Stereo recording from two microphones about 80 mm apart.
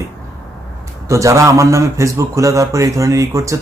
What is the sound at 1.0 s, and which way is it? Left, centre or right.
Speech, right.